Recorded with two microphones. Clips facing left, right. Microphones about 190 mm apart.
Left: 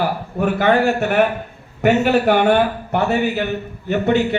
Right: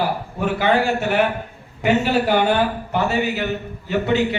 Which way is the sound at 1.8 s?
55° left (ahead or behind).